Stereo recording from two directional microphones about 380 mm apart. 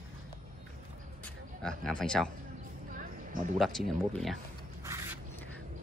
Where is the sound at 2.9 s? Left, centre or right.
Right.